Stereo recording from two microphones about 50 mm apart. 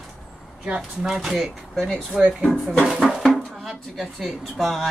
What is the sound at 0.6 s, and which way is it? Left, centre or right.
Speech, centre.